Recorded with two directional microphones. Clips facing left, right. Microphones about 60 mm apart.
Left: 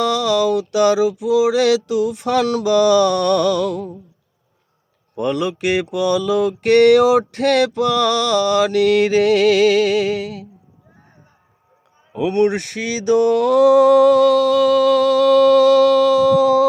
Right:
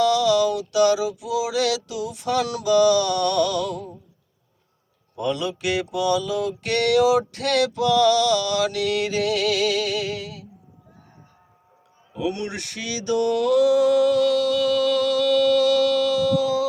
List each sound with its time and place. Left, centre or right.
0.0 s mantra: left
2.4 s mantra: left
5.1 s mantra: left
12.1 s mantra: left